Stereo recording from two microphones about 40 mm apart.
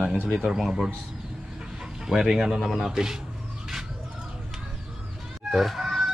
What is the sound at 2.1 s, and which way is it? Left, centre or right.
Speech, centre.